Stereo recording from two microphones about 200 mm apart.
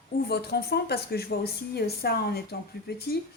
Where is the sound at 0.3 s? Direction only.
55° left (ahead or behind).